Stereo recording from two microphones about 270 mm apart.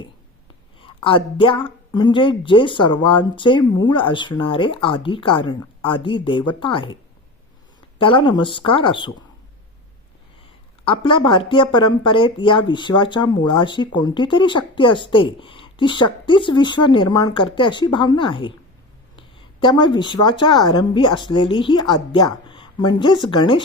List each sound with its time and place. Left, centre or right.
0.8 s speech: centre
7.9 s speech: centre
10.8 s a woman's voice: centre